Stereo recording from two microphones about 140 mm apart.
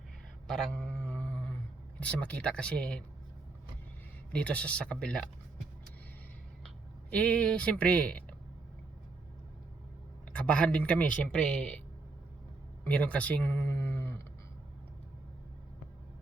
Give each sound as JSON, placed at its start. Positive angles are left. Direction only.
{"t": 0.4, "sound": "a sound", "side_deg": 5}
{"t": 2.0, "sound": "speech", "side_deg": 10}
{"t": 4.3, "sound": "speech", "side_deg": 10}
{"t": 7.1, "sound": "speech", "side_deg": 5}
{"t": 10.3, "sound": "speech", "side_deg": 5}
{"t": 12.8, "sound": "speech", "side_deg": 10}